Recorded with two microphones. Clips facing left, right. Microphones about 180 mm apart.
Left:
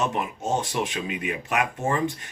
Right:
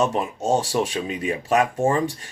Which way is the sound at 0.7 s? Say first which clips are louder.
Right 4 dB; 35° right (ahead or behind).